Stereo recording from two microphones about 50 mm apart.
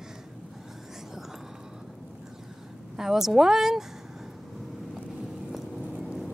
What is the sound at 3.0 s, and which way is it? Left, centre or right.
Speech, centre.